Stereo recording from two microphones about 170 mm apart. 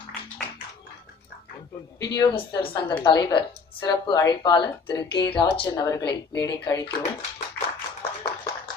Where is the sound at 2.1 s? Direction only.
25° left (ahead or behind).